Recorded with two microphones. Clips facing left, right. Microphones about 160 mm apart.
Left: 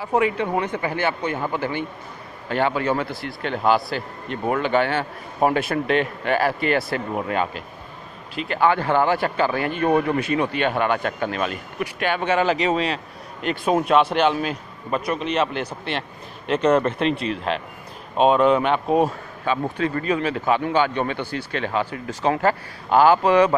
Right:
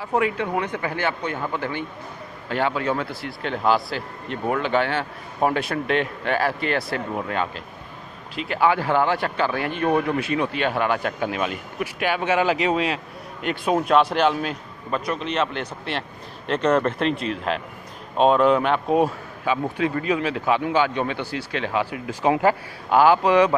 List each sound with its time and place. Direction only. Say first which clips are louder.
0.0 s speech: left 2 dB; centre (ahead or behind)
8.4 s speech: left 1 dB; 5° right (ahead or behind)